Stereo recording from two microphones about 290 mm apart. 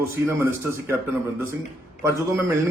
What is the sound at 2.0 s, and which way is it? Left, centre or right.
Speech, centre.